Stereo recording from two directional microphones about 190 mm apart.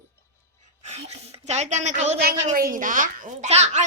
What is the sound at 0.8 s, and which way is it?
A child's voice, 35° right (ahead or behind).